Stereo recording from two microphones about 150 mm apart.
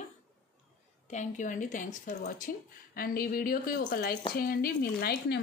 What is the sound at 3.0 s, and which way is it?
A woman's voice, 75° left (ahead or behind).